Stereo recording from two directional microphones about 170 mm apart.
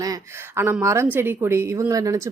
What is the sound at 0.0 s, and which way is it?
Speech, 20° right (ahead or behind).